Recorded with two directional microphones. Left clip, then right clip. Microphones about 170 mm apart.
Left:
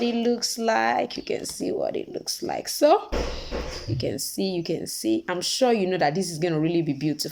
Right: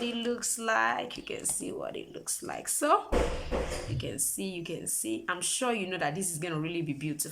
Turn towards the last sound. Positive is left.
turn(degrees=25)  # may be behind; listen again after turning